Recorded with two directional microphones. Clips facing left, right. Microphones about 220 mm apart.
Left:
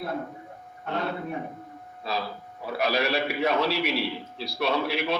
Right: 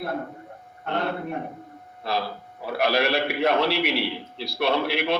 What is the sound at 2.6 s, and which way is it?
A man's voice, 60° right (ahead or behind).